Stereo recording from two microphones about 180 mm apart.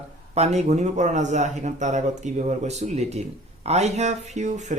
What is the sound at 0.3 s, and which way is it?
A man's voice, 40° right (ahead or behind).